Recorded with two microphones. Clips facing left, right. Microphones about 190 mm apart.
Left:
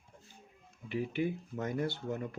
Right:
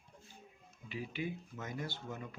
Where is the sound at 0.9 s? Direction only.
55° left (ahead or behind).